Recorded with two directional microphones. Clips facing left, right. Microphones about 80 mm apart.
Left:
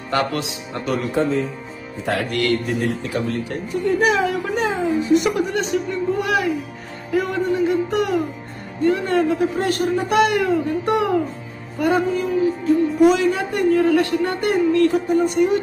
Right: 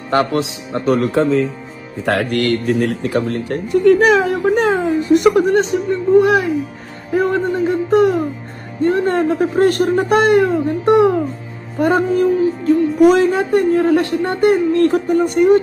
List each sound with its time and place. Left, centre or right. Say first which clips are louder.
0.1 s speech: right 5 dB; right
1.1 s speech: right 5 dB; right
2.0 s speech: right 4 dB; right
5.6 s speech: right 5 dB; right
11.8 s speech: right 5 dB; right
14.8 s speech: right 3 dB; right